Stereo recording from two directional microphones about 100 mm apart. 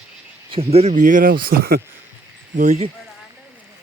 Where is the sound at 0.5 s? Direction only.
90° right.